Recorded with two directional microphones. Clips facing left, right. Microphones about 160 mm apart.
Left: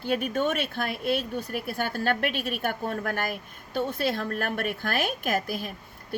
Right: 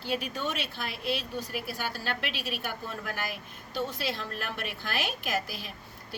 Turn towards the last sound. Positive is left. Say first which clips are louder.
# left 5 dB
turn(degrees=50)  # may be behind; listen again after turning